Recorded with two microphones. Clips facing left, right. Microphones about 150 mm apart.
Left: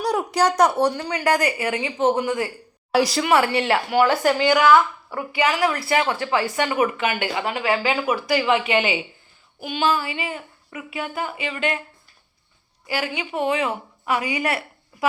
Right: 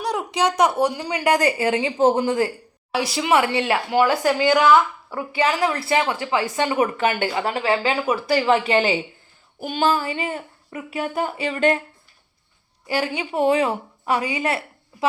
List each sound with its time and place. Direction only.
0.0 s a woman's voice: 5° left (ahead or behind); by 4.0 s 20° right (ahead or behind)
4.3 s speech: 20° left (ahead or behind)
4.6 s a woman's voice: 15° right (ahead or behind)
5.3 s a woman's voice: 30° right (ahead or behind)
12.9 s speech: 35° right (ahead or behind)